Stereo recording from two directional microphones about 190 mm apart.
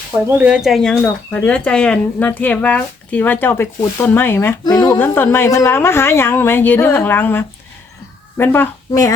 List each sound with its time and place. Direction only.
0.3 s a woman's voice: 10° right (ahead or behind); by 4.9 s 20° left (ahead or behind)
4.9 s a woman's voice: 10° left (ahead or behind)